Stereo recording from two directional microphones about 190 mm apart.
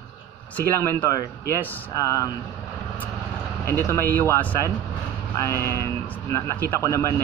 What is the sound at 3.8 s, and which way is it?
A man's voice, 15° left (ahead or behind).